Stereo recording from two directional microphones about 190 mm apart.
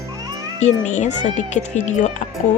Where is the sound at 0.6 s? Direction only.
40° left (ahead or behind).